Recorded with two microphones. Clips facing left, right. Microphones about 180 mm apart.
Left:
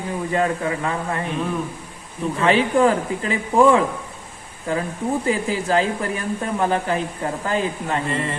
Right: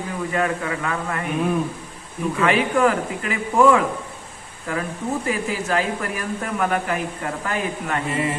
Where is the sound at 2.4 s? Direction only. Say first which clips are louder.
Left 2 dB; 30° left (ahead or behind).